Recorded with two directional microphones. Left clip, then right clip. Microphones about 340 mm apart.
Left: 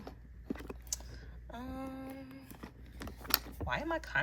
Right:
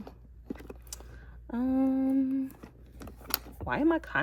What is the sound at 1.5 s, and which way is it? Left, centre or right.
Humming, right.